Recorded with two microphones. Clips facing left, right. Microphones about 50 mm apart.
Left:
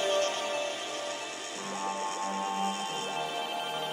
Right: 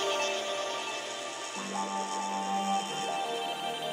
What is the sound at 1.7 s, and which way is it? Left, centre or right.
Music, left.